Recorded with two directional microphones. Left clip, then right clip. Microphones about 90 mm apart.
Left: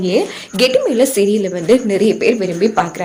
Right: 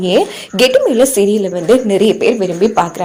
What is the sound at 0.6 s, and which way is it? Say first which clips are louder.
A woman's voice: right 3 dB; 40° right (ahead or behind).